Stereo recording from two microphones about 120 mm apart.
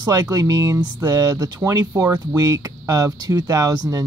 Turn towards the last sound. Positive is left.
turn(degrees=-30)  # may be behind; listen again after turning